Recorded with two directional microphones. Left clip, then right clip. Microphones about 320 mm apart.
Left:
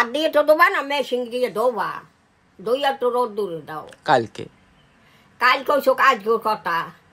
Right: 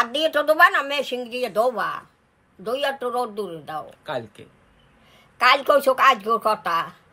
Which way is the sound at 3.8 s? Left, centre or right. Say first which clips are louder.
Left 12 dB; left.